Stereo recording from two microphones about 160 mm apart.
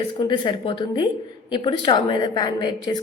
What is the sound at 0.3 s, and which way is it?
Speech, 30° left (ahead or behind).